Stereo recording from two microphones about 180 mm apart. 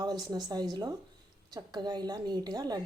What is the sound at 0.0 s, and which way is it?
A woman's voice, 20° right (ahead or behind).